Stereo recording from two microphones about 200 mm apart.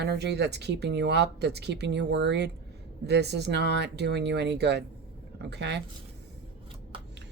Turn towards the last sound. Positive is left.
turn(degrees=-60)  # may be behind; listen again after turning